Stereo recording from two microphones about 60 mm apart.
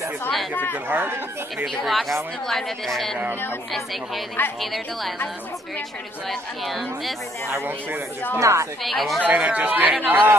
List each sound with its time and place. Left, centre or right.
0.8 s speech: right
1.8 s speech: centre
4.6 s speech: centre
6.6 s speech: centre
8.4 s a woman's voice: right
8.8 s speech: centre
9.2 s speech: right